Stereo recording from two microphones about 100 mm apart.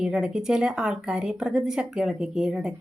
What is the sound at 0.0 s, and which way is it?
Speech, 10° right (ahead or behind).